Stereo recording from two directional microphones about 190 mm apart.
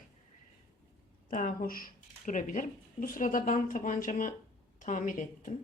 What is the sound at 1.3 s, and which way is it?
Speech, 45° left (ahead or behind).